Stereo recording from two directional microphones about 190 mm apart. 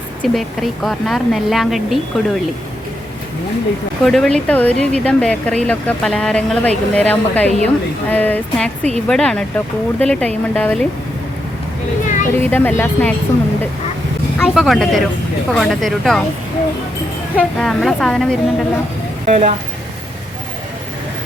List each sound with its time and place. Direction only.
0.2 s a woman's voice: centre (ahead or behind)
4.0 s a woman's voice: centre (ahead or behind)
12.0 s a sound: 40° left (ahead or behind)
12.4 s speech: 10° left (ahead or behind)
14.3 s a woman's voice: centre (ahead or behind)
17.3 s a woman's voice: 5° left (ahead or behind)
19.2 s speech: 35° right (ahead or behind)